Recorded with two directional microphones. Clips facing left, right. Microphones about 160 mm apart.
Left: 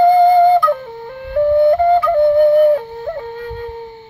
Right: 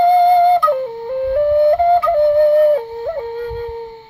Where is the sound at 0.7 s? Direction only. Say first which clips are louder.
Right 2 dB; 25° right (ahead or behind).